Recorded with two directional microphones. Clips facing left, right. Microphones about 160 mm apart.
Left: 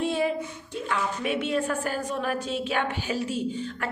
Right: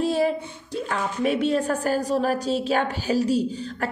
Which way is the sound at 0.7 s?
40° right (ahead or behind).